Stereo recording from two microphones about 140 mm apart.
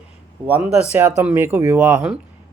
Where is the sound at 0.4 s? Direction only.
10° right (ahead or behind).